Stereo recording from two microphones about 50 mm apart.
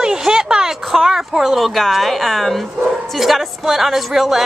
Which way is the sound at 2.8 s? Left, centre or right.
Centre.